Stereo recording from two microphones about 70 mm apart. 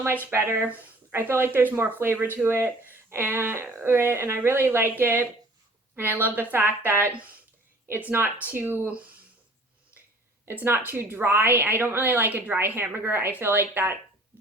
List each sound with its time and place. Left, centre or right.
0.0 s speech: right
10.5 s speech: right